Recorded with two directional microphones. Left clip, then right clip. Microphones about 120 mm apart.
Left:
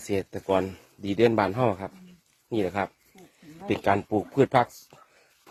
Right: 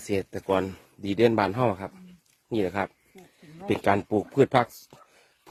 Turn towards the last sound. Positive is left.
turn(degrees=-60)  # may be behind; listen again after turning